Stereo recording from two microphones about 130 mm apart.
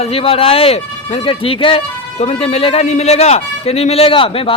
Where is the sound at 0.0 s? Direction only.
50° left (ahead or behind).